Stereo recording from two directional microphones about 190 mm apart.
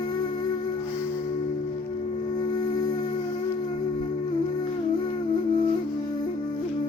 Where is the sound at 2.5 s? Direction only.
20° left (ahead or behind).